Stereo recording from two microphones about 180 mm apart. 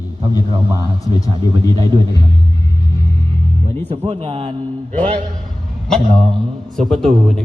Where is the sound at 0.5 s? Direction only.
20° right (ahead or behind).